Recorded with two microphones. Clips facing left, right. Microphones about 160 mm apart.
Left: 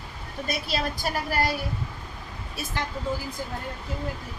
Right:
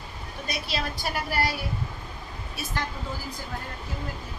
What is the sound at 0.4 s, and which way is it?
A woman's voice, 45° left (ahead or behind).